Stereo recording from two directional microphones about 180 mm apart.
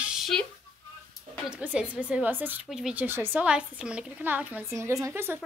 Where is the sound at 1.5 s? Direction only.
5° right (ahead or behind).